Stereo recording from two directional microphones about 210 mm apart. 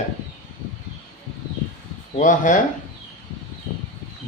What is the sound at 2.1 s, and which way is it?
Speech, 40° left (ahead or behind).